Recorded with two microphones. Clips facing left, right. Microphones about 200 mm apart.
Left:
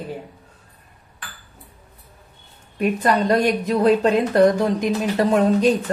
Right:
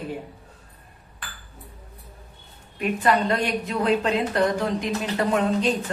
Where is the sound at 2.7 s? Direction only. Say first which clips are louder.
Left 3 dB; 40° left (ahead or behind).